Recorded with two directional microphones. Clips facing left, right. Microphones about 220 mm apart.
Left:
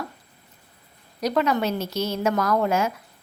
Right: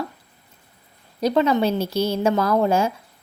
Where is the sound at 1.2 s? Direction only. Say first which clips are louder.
Right 4 dB; 30° right (ahead or behind).